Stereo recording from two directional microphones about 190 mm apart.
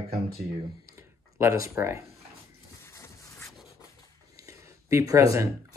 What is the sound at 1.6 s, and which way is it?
Speech, 15° right (ahead or behind).